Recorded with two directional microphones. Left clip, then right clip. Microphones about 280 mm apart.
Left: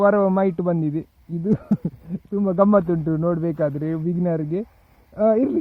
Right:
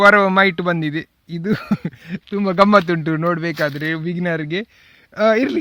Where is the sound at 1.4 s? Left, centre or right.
Right.